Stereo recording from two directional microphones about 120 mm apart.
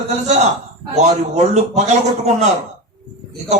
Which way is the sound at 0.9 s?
70° right (ahead or behind).